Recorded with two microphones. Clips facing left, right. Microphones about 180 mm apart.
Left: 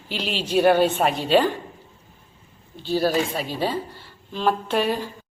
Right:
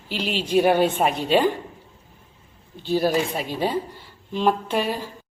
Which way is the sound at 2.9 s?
20° right (ahead or behind).